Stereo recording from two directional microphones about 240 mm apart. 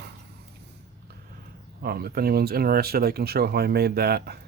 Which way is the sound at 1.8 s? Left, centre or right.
Right.